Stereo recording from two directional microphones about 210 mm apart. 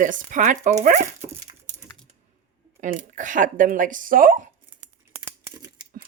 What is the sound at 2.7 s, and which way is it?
Speech, 35° right (ahead or behind).